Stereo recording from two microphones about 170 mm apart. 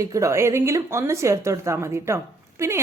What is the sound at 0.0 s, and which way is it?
Speech, 20° right (ahead or behind).